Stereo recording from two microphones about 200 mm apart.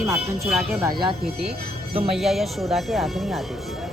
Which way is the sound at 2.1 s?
Centre (ahead or behind).